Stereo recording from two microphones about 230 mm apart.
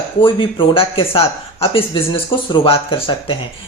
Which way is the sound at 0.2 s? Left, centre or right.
Left.